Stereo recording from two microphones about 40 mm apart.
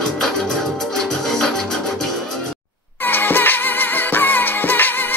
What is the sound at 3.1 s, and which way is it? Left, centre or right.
Music, left.